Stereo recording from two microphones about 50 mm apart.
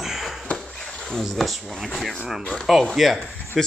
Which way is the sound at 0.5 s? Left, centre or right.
Centre.